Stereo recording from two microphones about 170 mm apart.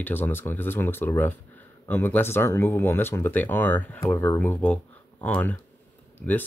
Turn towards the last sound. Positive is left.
turn(degrees=10)  # may be behind; listen again after turning